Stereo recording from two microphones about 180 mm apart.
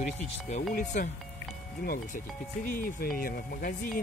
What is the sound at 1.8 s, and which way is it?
Speech, 55° left (ahead or behind).